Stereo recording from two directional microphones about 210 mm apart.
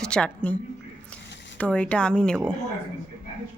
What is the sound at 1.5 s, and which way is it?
Speech, 5° left (ahead or behind).